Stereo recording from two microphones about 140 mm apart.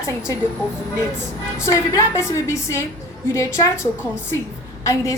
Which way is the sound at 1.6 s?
20° left (ahead or behind).